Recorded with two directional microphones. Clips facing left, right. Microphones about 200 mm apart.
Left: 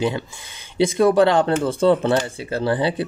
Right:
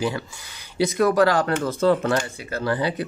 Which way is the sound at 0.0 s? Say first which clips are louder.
Left 3 dB; 25° left (ahead or behind).